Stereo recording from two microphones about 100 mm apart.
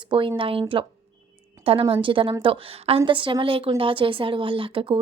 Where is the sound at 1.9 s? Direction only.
60° right (ahead or behind).